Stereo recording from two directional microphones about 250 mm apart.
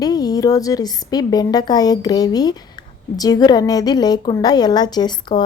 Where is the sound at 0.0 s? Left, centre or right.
Centre.